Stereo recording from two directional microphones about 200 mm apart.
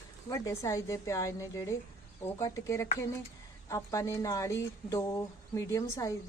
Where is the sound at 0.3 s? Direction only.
15° left (ahead or behind).